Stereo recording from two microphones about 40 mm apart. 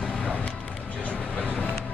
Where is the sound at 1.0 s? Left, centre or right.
Left.